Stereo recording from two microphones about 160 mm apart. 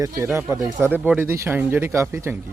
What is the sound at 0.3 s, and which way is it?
Speech, 15° right (ahead or behind).